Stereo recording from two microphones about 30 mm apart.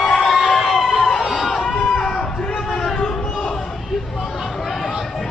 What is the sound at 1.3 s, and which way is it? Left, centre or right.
Music, centre.